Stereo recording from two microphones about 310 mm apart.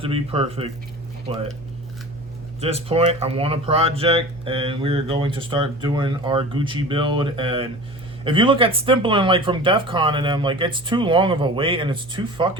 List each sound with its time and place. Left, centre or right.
0.0 s speech: centre
2.6 s speech: centre